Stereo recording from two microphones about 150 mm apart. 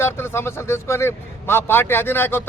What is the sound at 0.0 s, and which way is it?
Speech, 15° left (ahead or behind).